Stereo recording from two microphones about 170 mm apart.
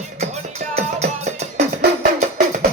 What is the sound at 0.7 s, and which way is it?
Music, 40° right (ahead or behind).